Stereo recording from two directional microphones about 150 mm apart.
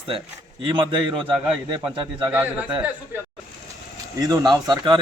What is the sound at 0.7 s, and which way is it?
Speech, 35° right (ahead or behind).